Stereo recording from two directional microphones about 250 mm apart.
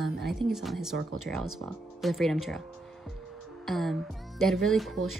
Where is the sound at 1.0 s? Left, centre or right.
Right.